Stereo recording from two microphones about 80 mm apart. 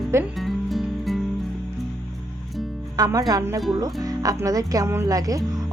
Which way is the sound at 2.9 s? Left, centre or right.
Right.